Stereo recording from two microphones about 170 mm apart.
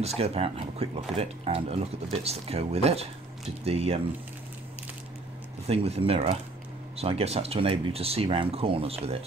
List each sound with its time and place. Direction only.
0.0 s speech: 35° right (ahead or behind)
5.7 s speech: 35° right (ahead or behind)